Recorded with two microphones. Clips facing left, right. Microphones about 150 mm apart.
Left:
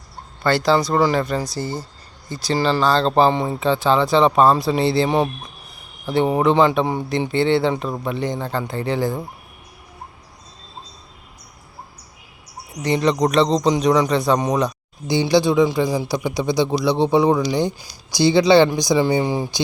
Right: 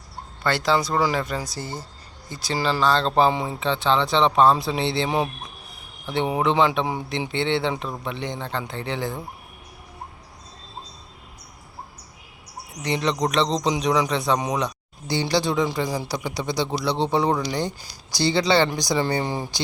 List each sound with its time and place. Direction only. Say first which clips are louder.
0.4 s speech: left 5 dB; centre (ahead or behind)
1.5 s speech: left 6 dB; 30° left (ahead or behind)
2.5 s speech: left 4 dB; 5° right (ahead or behind)
12.8 s speech: left 6 dB; centre (ahead or behind)
15.0 s speech: left 6 dB; 15° left (ahead or behind)
15.9 s speech: left 6 dB; 15° left (ahead or behind)